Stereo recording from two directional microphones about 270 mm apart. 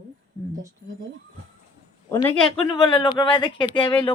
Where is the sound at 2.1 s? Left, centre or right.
Centre.